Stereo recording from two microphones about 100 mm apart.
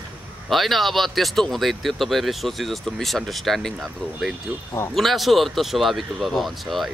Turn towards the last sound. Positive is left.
turn(degrees=0)  # may be behind; listen again after turning